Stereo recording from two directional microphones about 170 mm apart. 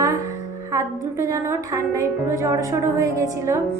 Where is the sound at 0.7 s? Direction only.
20° right (ahead or behind).